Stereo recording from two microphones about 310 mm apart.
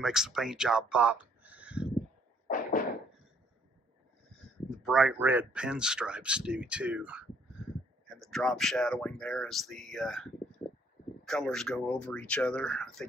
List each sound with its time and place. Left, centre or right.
0.0 s speech: centre
2.4 s a sound: left
4.3 s speech: centre